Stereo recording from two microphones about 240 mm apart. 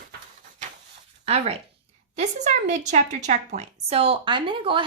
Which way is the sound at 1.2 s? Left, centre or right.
Right.